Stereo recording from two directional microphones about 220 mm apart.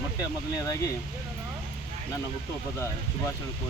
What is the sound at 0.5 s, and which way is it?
Speech, 15° left (ahead or behind).